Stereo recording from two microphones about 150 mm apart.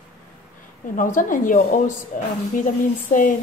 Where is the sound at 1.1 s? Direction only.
60° left (ahead or behind).